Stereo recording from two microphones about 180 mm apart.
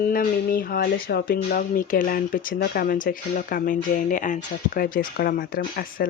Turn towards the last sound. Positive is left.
turn(degrees=55)  # may be behind; listen again after turning